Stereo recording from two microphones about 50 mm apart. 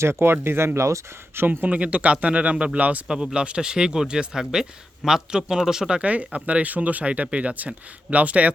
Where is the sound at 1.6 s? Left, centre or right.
Right.